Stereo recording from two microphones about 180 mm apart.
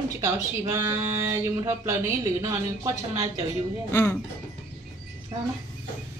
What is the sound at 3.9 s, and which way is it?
Speech, 10° left (ahead or behind).